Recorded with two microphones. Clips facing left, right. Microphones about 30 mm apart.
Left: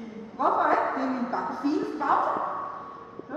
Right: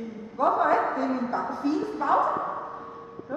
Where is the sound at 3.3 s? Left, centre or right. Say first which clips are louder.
Right 3 dB; centre.